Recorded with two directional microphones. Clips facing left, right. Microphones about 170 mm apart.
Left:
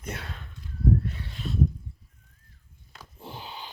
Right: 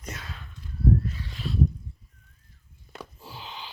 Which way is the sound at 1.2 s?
55° left (ahead or behind).